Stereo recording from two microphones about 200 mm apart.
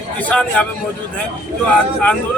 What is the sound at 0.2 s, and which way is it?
Speech, 5° left (ahead or behind).